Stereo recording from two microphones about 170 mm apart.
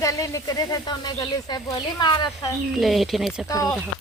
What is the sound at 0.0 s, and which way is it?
Speech, 20° left (ahead or behind).